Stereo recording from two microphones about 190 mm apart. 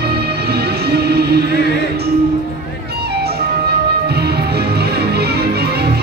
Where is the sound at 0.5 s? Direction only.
60° right (ahead or behind).